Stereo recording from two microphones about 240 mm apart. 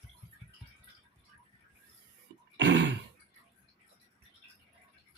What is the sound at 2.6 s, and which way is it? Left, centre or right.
Throat clearing, right.